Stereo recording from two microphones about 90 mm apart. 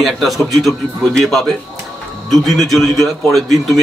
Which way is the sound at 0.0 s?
Centre (ahead or behind).